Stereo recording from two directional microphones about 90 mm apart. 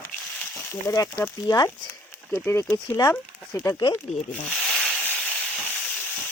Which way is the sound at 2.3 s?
25° left (ahead or behind).